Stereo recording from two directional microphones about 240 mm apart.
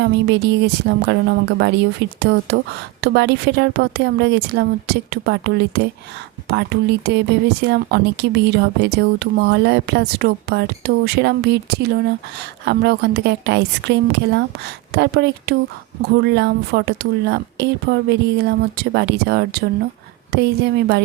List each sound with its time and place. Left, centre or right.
0.0 s speech: right